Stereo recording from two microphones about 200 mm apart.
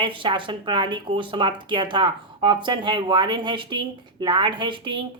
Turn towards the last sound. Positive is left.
turn(degrees=-25)  # may be behind; listen again after turning